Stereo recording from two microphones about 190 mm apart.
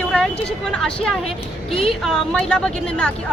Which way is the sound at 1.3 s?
30° left (ahead or behind).